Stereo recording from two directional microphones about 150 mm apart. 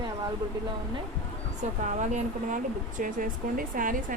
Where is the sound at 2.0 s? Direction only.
55° right (ahead or behind).